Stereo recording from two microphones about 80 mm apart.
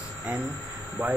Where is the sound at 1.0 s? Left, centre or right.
Right.